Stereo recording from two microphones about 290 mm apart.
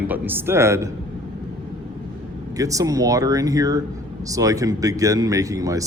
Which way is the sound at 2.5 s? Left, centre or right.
Centre.